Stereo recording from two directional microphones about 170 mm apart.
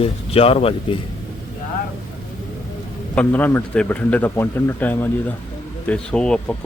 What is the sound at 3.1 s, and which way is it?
A man's voice, 10° left (ahead or behind).